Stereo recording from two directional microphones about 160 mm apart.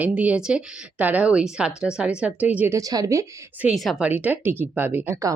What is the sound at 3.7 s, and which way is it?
Speech, centre (ahead or behind).